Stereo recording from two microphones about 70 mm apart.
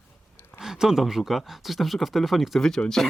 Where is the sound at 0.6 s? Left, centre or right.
Centre.